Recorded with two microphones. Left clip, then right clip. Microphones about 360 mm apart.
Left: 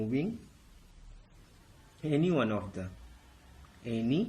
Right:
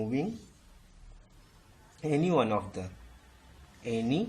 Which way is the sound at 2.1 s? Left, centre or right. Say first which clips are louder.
Right 3 dB; centre.